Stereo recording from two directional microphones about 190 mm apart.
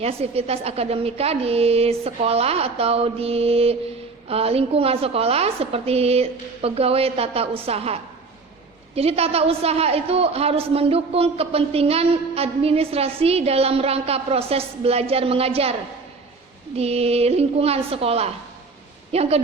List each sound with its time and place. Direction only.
0.0 s a woman's voice: 30° right (ahead or behind)
9.0 s a woman's voice: 30° right (ahead or behind)
16.7 s a woman's voice: 35° right (ahead or behind)